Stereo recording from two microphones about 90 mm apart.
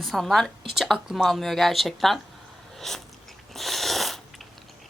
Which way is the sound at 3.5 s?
Centre (ahead or behind).